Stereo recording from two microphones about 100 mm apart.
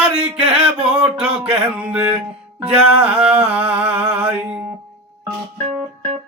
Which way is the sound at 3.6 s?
75° right (ahead or behind).